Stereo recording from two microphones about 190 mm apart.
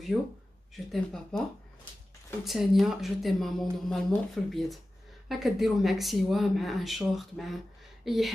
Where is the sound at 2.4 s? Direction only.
Centre (ahead or behind).